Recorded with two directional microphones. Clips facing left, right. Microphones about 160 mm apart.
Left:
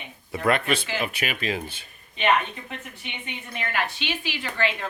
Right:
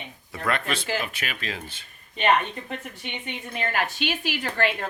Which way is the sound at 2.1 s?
40° right (ahead or behind).